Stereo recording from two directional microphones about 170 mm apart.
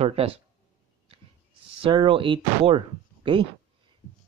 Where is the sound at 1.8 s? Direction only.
30° right (ahead or behind).